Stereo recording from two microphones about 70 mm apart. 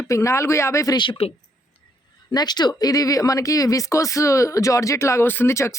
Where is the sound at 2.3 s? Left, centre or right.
Left.